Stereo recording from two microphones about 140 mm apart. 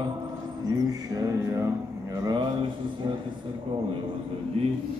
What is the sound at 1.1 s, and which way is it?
Music, 25° right (ahead or behind).